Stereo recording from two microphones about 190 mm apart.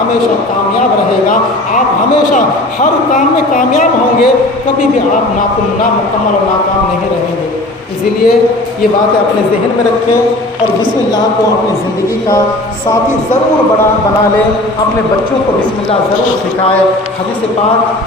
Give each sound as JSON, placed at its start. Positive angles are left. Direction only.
{"t": 3.2, "sound": "speech", "side_deg": 45}